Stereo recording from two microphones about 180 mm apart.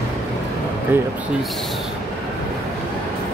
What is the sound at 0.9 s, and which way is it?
Speech, 10° right (ahead or behind).